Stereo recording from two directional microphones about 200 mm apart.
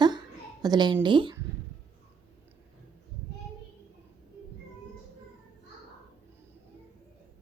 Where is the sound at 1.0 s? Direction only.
25° right (ahead or behind).